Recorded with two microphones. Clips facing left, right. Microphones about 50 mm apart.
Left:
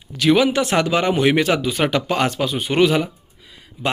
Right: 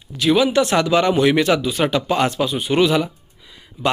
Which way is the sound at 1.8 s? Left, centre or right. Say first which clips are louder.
Even; left.